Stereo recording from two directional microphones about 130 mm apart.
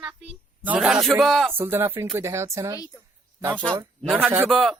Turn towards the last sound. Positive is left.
turn(degrees=0)  # may be behind; listen again after turning